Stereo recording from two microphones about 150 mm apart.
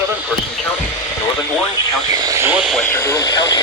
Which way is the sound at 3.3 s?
25° left (ahead or behind).